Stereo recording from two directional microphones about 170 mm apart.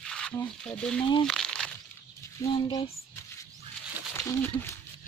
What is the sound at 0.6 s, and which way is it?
Speech, 5° left (ahead or behind).